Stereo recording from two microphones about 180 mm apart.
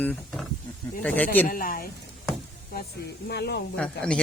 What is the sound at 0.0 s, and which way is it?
Speech, 5° left (ahead or behind).